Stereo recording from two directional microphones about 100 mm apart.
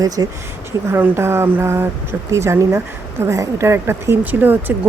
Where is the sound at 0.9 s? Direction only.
25° right (ahead or behind).